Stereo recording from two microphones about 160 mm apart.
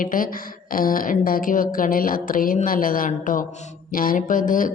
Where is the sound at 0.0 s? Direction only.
60° left (ahead or behind).